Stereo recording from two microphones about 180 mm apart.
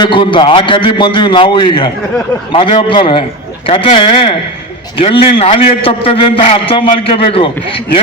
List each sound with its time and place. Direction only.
0.0 s a man's voice: 25° left (ahead or behind)